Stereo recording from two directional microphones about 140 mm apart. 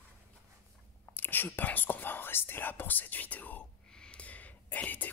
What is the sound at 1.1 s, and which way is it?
Whispering, 15° left (ahead or behind).